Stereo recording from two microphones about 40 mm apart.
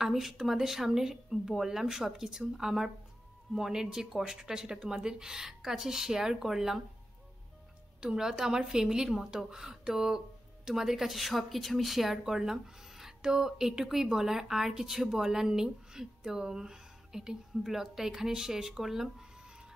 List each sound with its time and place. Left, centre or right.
0.0 s speech: centre
8.0 s speech: centre